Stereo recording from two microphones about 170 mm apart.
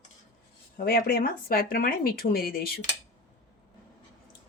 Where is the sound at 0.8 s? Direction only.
55° left (ahead or behind).